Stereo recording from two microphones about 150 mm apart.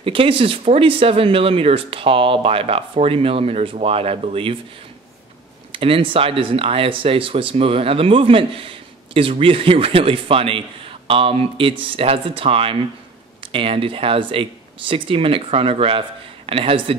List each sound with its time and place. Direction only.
0.0 s speech: 35° right (ahead or behind)
5.7 s speech: 35° right (ahead or behind)